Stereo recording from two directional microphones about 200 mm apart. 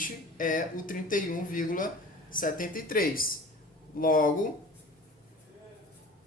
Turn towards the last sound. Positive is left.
turn(degrees=40)  # may be behind; listen again after turning